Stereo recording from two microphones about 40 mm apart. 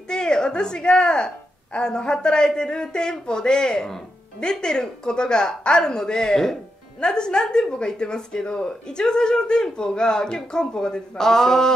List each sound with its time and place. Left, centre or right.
0.1 s a woman's voice: left